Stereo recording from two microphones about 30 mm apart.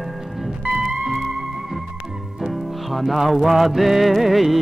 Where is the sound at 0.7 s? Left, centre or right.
Centre.